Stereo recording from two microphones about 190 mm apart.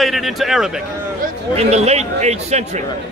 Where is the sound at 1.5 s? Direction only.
35° right (ahead or behind).